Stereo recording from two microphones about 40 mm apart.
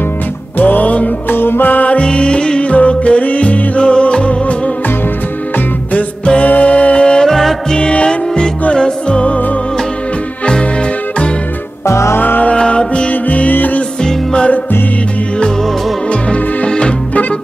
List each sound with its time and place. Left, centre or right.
0.6 s music: left
1.3 s music: left
2.0 s music: left
2.7 s music: left
6.4 s music: left
7.2 s music: centre
7.7 s music: left
10.4 s music: left
12.2 s music: left
12.4 s music: left
13.1 s music: left
14.0 s music: left
16.1 s music: left